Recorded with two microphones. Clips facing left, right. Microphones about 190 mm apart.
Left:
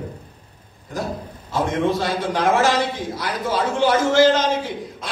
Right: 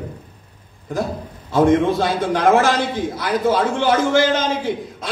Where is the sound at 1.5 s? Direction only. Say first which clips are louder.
Right 6 dB; 55° right (ahead or behind).